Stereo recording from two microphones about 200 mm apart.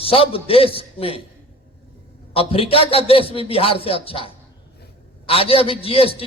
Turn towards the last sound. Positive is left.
turn(degrees=30)  # may be behind; listen again after turning